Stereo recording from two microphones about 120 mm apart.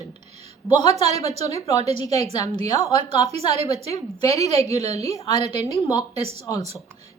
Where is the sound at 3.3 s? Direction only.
60° right (ahead or behind).